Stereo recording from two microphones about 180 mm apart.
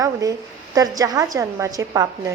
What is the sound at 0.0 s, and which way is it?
A woman's voice, 20° right (ahead or behind).